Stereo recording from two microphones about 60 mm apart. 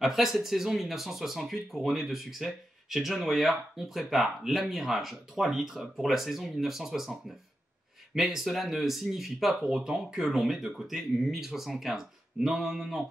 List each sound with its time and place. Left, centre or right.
0.0 s speech: centre